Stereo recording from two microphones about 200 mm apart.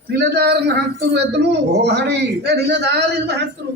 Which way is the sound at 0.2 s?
55° right (ahead or behind).